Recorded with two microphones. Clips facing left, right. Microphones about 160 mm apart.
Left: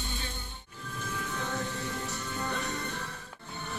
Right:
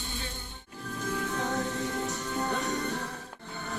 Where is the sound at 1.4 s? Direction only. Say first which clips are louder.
Right 2 dB; 45° right (ahead or behind).